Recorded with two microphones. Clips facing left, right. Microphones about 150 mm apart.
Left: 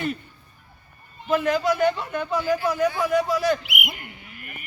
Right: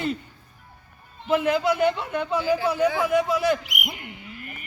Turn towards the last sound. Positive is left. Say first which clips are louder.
# right 2 dB
turn(degrees=-30)  # may be behind; listen again after turning